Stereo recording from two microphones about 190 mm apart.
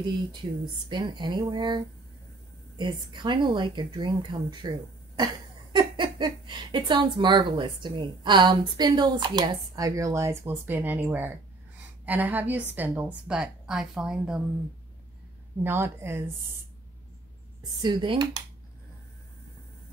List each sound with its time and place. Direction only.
0.8 s a woman's voice: 25° right (ahead or behind); by 14.4 s 5° right (ahead or behind)
15.6 s a woman's voice: 10° right (ahead or behind)
17.8 s speech: 25° right (ahead or behind)